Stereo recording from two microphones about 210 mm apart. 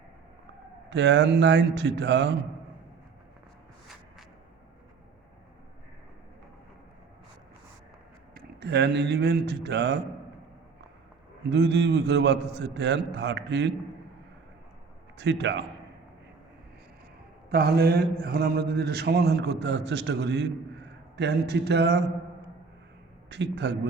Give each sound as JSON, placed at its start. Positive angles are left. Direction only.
{"t": 0.9, "sound": "a man's voice", "side_deg": -55}
{"t": 8.4, "sound": "mantra", "side_deg": -50}
{"t": 11.5, "sound": "a man's voice", "side_deg": -55}
{"t": 15.2, "sound": "a man's voice", "side_deg": -55}
{"t": 17.5, "sound": "mantra", "side_deg": -50}
{"t": 23.3, "sound": "a man's voice", "side_deg": -55}